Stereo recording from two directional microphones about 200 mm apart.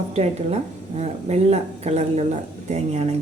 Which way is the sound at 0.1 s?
30° right (ahead or behind).